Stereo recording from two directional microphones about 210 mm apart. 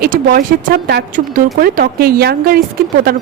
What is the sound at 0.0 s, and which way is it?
Speech, 45° right (ahead or behind).